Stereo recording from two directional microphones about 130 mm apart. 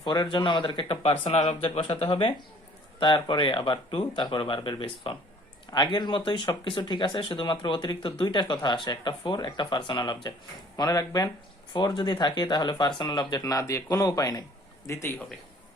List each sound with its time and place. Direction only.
0.0 s speech: 35° left (ahead or behind)